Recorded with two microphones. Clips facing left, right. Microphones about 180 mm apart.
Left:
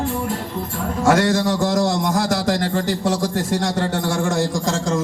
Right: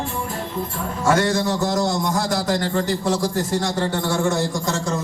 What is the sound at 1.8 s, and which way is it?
Speech, 90° left.